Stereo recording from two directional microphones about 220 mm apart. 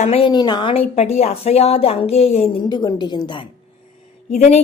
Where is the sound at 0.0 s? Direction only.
25° left (ahead or behind).